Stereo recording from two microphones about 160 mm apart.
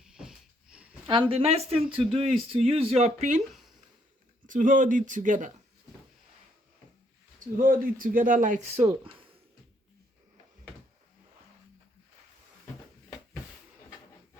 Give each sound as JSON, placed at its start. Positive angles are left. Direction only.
{"t": 0.0, "sound": "a sound", "side_deg": -5}
{"t": 1.0, "sound": "speech", "side_deg": -35}
{"t": 2.0, "sound": "speech", "side_deg": 0}
{"t": 2.5, "sound": "speech", "side_deg": -35}
{"t": 4.4, "sound": "speech", "side_deg": -55}
{"t": 7.3, "sound": "speech", "side_deg": -60}